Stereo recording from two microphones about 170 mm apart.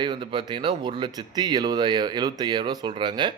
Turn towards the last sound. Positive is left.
turn(degrees=-25)  # may be behind; listen again after turning